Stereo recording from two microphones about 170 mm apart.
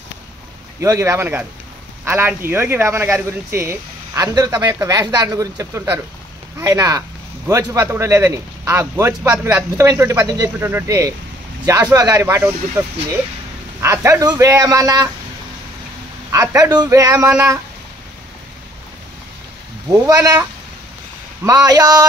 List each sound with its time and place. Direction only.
0.7 s a man's voice: 15° right (ahead or behind)
16.3 s a man's voice: 20° right (ahead or behind)
20.1 s a man's voice: 20° right (ahead or behind)
21.5 s a man's voice: 20° right (ahead or behind)